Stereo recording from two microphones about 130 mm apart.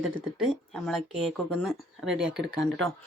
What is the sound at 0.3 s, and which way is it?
Speech, centre (ahead or behind).